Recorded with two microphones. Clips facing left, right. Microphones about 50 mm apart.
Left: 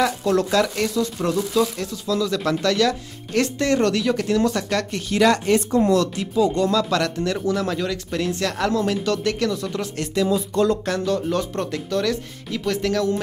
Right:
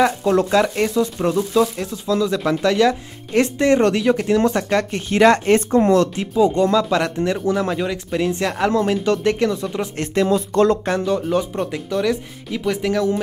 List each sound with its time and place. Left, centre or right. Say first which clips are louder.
0.0 s speech: right 3 dB; right
10.2 s speech: right 4 dB; right
10.9 s speech: right 3 dB; centre